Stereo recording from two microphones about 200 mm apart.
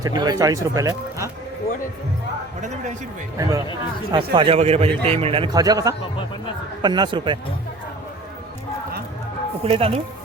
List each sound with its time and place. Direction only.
0.0 s speech: 20° right (ahead or behind)
2.6 s a man's voice: 35° right (ahead or behind)
4.1 s a man's voice: 25° right (ahead or behind)
9.6 s a man's voice: 30° right (ahead or behind)